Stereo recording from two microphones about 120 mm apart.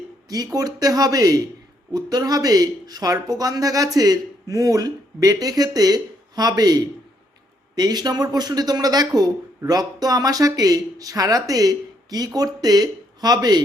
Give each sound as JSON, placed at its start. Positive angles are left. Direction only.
{"t": 0.3, "sound": "speech", "side_deg": -30}